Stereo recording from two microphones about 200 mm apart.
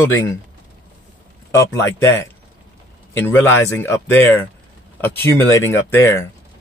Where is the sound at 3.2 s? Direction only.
10° left (ahead or behind).